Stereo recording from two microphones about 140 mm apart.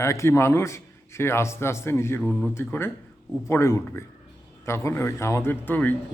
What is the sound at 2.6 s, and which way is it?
Speech, 15° left (ahead or behind).